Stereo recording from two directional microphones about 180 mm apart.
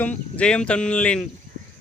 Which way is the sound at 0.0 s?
5° left (ahead or behind).